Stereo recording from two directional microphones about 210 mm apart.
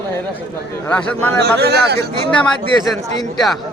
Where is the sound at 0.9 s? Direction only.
10° left (ahead or behind).